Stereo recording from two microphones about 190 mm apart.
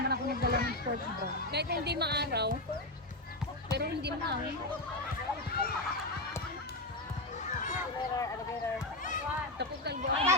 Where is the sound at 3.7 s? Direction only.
60° right (ahead or behind).